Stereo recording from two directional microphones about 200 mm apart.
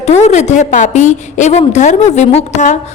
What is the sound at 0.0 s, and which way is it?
A woman's voice, 35° left (ahead or behind).